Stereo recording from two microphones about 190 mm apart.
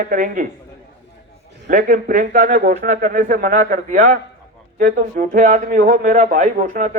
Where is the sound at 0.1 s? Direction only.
45° right (ahead or behind).